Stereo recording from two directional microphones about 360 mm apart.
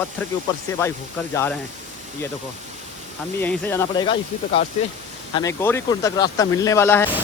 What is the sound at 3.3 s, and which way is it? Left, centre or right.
Speech, centre.